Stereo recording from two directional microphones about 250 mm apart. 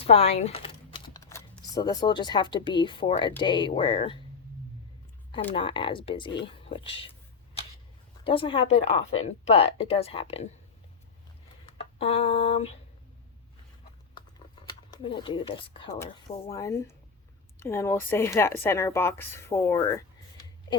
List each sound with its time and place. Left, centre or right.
0.0 s speech: left
5.5 s speech: centre
8.2 s speech: left
11.6 s speech: left
14.2 s a sound: centre
16.5 s speech: centre